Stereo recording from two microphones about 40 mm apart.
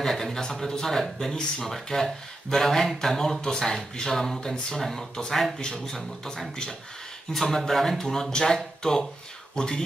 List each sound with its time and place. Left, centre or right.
0.0 s speech: centre
9.6 s speech: centre